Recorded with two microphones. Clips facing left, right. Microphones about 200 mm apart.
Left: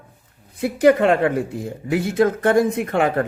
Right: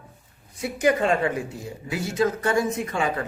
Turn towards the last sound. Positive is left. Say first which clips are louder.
# left 7 dB
turn(degrees=60)  # may be behind; listen again after turning